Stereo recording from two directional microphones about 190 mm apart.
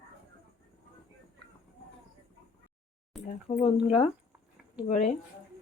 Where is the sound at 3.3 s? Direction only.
40° left (ahead or behind).